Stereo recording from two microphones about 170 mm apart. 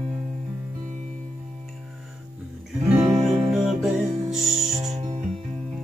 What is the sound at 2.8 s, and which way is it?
Music, centre (ahead or behind).